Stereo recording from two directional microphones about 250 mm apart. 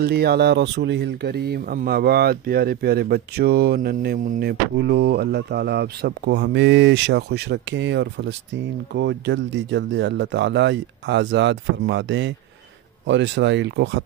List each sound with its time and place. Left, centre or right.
0.0 s speech: right